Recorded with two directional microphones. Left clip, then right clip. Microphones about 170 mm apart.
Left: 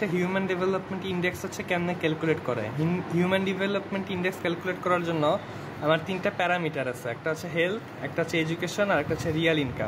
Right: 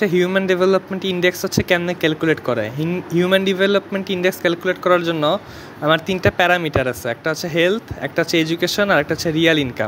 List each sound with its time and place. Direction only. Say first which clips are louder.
0.0 s speech: right 11 dB; 30° right (ahead or behind)